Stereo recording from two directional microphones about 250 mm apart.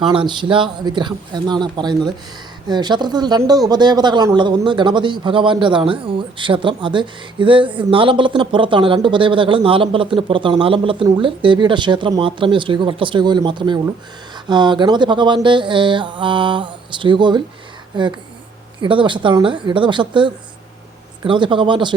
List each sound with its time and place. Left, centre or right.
0.1 s speech: centre